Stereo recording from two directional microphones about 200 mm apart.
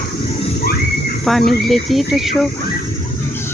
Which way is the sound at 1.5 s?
Centre (ahead or behind).